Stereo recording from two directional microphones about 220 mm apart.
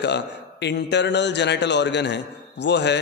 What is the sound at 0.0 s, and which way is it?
A man's voice, 50° left (ahead or behind).